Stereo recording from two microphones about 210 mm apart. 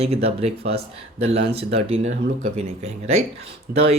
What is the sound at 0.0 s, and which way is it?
Speech, 30° right (ahead or behind).